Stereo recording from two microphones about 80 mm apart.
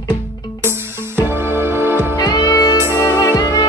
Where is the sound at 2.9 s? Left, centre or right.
Left.